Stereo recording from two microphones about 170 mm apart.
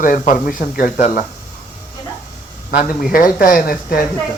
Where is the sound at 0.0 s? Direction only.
55° left (ahead or behind).